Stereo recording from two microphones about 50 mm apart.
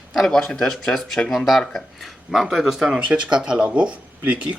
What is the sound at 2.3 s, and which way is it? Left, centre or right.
Speech, centre.